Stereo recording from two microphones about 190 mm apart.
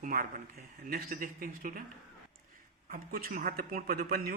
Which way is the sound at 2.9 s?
50° right (ahead or behind).